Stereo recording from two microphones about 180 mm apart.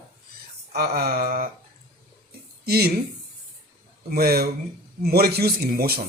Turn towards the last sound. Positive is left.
turn(degrees=-60)  # may be behind; listen again after turning